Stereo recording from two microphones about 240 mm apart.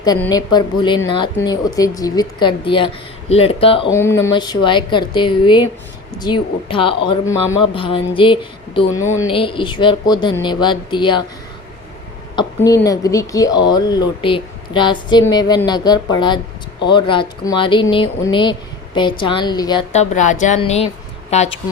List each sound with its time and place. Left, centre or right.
0.2 s speech: centre
3.9 s speech: centre
12.4 s speech: centre